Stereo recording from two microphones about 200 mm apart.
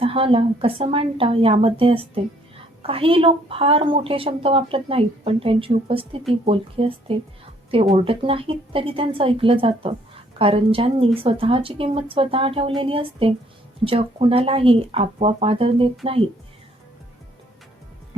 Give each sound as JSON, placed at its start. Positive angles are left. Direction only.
{"t": 0.0, "sound": "a woman's voice", "side_deg": -30}